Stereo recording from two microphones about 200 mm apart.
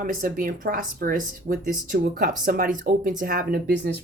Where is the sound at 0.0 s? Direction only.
40° right (ahead or behind).